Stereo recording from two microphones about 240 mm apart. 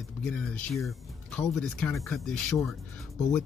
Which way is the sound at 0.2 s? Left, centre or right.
Centre.